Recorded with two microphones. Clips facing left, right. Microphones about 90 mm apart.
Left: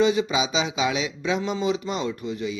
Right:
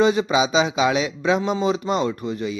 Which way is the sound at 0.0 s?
45° right (ahead or behind).